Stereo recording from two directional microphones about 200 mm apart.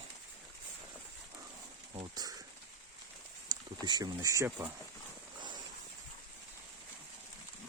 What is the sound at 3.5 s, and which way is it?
Speech, 20° right (ahead or behind).